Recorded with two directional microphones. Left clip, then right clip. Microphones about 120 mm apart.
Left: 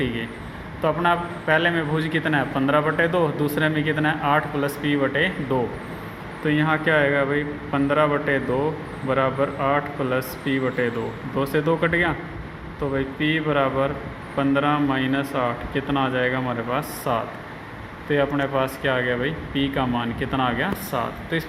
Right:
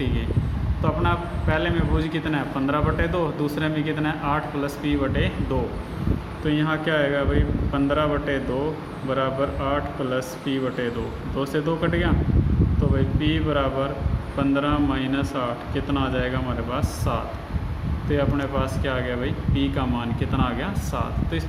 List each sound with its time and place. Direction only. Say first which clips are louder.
0.8 s a man's voice: left 4 dB; 30° left (ahead or behind)
13.1 s a man's voice: left 3 dB; 25° left (ahead or behind)